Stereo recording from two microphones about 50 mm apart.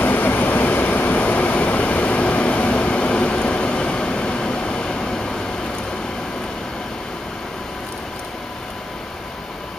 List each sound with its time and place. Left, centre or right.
0.0 s train: left; by 5.4 s centre